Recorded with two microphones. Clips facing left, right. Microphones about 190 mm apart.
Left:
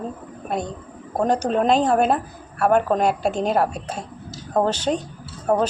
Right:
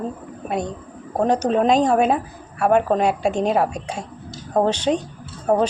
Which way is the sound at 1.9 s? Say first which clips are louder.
Right 1 dB; 5° right (ahead or behind).